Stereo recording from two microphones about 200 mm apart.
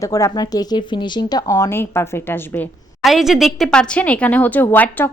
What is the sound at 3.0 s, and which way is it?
A woman's voice, centre (ahead or behind).